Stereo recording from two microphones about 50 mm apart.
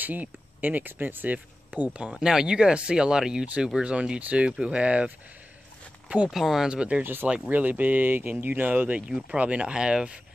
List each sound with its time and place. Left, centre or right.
0.0 s speech: right
2.0 s speech: centre
6.3 s speech: centre
6.7 s speech: centre
7.0 s speech: right
7.4 s speech: right; by 10.1 s centre